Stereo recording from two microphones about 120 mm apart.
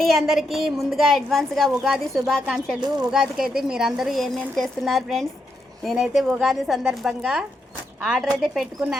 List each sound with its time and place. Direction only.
0.0 s a woman's voice: centre (ahead or behind)